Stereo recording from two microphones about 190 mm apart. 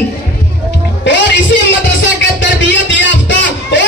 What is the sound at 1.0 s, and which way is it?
Music, 65° left (ahead or behind).